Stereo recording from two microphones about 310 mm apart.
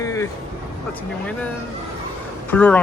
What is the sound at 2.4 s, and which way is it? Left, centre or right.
Speech, centre.